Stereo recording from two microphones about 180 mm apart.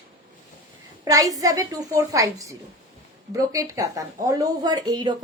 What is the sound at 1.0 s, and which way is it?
A woman's voice, 20° right (ahead or behind).